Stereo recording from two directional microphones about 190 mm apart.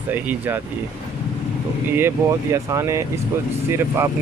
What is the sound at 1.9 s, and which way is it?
Speech, 10° right (ahead or behind).